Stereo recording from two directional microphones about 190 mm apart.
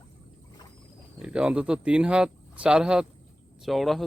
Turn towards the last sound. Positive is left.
turn(degrees=0)  # may be behind; listen again after turning